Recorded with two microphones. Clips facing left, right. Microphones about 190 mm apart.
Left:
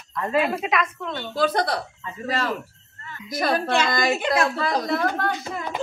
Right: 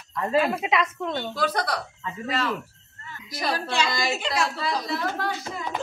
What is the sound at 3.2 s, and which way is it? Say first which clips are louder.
A woman's voice: left 5 dB; 50° left (ahead or behind).